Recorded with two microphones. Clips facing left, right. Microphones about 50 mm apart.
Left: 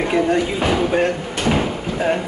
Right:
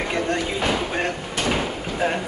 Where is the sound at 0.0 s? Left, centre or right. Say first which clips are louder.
Left 6 dB; centre.